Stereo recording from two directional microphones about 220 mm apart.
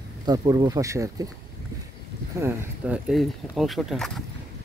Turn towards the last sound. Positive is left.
turn(degrees=0)  # may be behind; listen again after turning